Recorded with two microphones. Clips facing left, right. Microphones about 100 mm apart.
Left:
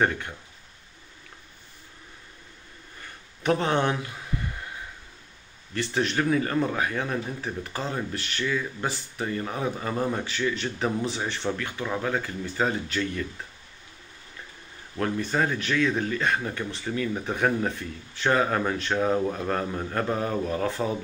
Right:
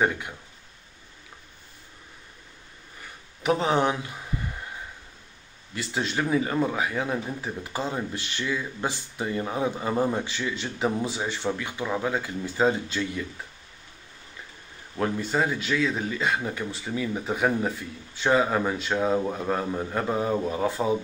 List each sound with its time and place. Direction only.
3.4 s speech: 15° right (ahead or behind)
5.8 s speech: 15° right (ahead or behind)
15.0 s speech: 15° right (ahead or behind)